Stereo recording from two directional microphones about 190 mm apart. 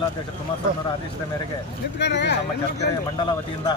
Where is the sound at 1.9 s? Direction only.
65° left (ahead or behind).